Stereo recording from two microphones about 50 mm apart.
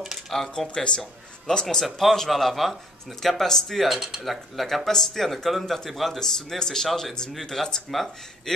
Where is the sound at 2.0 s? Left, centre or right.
Centre.